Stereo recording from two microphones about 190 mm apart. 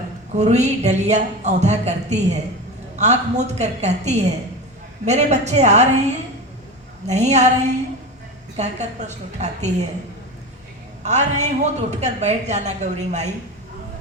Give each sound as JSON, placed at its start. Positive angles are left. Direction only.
{"t": 0.3, "sound": "a woman's voice", "side_deg": -35}
{"t": 7.1, "sound": "a woman's voice", "side_deg": -35}
{"t": 11.0, "sound": "a woman's voice", "side_deg": -35}